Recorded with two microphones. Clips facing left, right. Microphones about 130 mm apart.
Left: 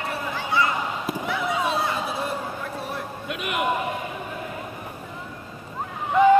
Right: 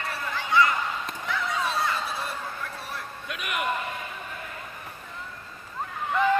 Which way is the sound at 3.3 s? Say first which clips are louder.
Left 4 dB; 20° left (ahead or behind).